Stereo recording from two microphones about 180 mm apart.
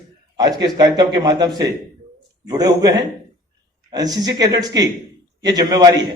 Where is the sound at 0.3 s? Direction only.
20° right (ahead or behind).